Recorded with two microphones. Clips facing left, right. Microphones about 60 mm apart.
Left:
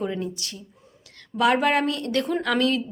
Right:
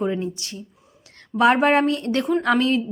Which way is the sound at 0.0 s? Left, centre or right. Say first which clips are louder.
Right 4 dB; right.